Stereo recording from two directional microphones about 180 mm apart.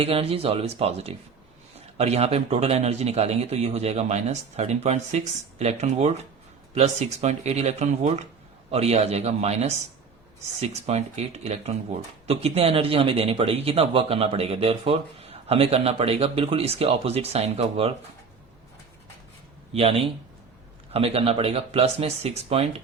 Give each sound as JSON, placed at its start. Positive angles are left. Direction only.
{"t": 0.0, "sound": "speech", "side_deg": -30}
{"t": 19.7, "sound": "speech", "side_deg": -35}